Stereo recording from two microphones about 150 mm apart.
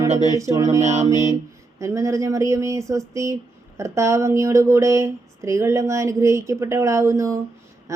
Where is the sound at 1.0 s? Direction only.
20° right (ahead or behind).